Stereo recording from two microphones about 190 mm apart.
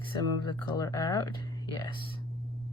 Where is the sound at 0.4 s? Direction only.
20° left (ahead or behind).